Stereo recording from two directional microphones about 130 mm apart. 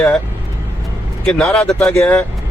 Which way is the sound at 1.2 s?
5° left (ahead or behind).